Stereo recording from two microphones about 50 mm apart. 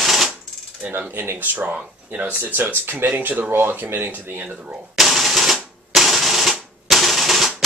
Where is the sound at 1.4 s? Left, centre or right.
Right.